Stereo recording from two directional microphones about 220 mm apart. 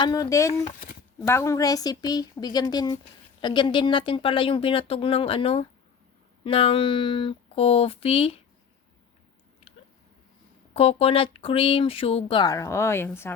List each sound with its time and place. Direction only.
0.0 s speech: 15° left (ahead or behind)
0.6 s speech: 40° left (ahead or behind)
1.3 s speech: 15° left (ahead or behind)
10.8 s speech: 25° left (ahead or behind); by 13.3 s 10° left (ahead or behind)